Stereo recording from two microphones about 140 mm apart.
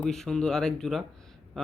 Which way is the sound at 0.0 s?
5° left (ahead or behind).